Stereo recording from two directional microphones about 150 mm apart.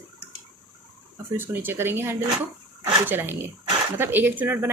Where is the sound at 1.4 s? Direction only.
15° right (ahead or behind).